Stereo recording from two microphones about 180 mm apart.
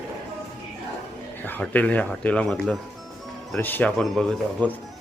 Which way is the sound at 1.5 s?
10° left (ahead or behind).